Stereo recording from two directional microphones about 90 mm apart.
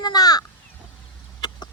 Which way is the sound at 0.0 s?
45° left (ahead or behind).